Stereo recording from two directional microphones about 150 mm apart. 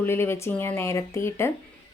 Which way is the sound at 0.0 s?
15° left (ahead or behind).